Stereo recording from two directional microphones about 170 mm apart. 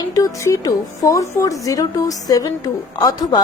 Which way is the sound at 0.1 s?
20° left (ahead or behind).